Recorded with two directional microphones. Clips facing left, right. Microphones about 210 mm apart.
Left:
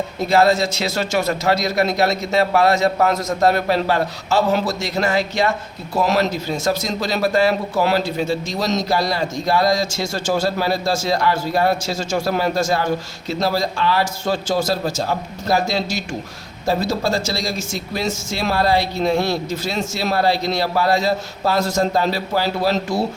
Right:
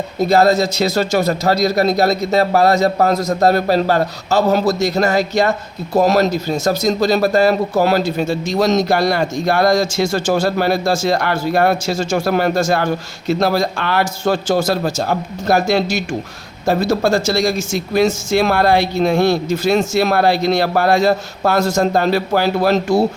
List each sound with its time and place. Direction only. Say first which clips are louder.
0.3 s a man's voice: right 2 dB; 40° right (ahead or behind); by 23.0 s 55° right (ahead or behind)